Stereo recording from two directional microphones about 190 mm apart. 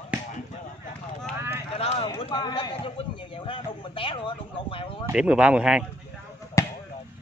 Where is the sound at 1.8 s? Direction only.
35° left (ahead or behind).